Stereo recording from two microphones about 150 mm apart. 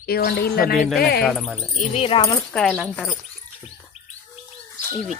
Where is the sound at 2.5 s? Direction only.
5° left (ahead or behind).